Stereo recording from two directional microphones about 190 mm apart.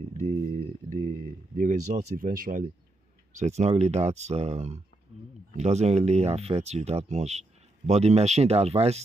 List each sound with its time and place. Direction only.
0.0 s speech: 40° right (ahead or behind)
3.3 s speech: 35° right (ahead or behind)